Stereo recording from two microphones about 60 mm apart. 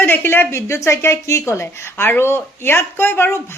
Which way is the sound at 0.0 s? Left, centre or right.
Left.